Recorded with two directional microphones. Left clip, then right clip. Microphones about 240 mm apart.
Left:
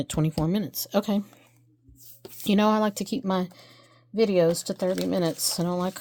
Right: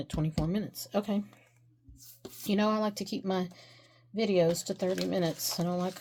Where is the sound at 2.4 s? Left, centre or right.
Left.